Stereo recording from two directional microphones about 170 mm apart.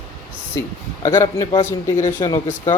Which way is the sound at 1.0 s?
15° left (ahead or behind).